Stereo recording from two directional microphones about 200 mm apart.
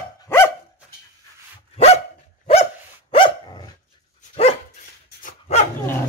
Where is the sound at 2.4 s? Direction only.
30° left (ahead or behind).